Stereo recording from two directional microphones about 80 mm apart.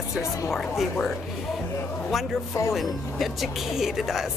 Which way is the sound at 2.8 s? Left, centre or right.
Centre.